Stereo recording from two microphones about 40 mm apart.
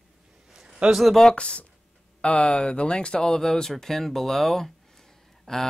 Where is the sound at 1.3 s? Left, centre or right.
Left.